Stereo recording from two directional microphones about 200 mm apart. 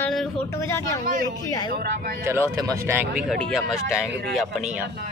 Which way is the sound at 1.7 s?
50° right (ahead or behind).